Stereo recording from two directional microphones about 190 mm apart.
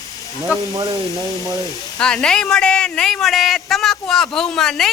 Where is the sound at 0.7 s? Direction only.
20° right (ahead or behind).